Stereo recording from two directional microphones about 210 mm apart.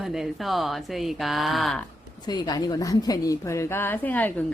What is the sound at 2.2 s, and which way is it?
A woman's voice, 20° left (ahead or behind).